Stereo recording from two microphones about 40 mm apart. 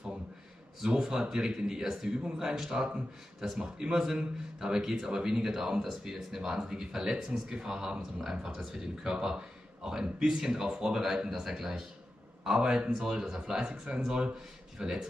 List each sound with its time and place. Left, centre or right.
0.7 s speech: centre